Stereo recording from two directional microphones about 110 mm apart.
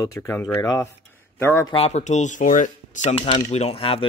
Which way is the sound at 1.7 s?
75° left (ahead or behind).